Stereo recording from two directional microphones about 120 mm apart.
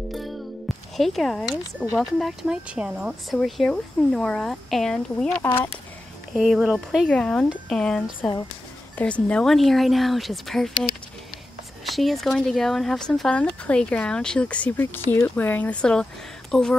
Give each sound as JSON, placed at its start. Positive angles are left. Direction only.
{"t": 0.1, "sound": "music", "side_deg": 0}
{"t": 2.0, "sound": "speech", "side_deg": 0}
{"t": 5.4, "sound": "speech", "side_deg": 15}
{"t": 6.3, "sound": "speech", "side_deg": -5}
{"t": 7.1, "sound": "speech", "side_deg": 10}
{"t": 11.8, "sound": "speech", "side_deg": 0}